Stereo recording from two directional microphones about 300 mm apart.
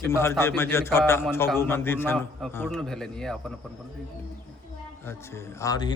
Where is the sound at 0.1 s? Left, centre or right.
Centre.